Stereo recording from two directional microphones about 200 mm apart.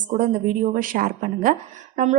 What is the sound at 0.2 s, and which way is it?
A woman's voice, 40° right (ahead or behind).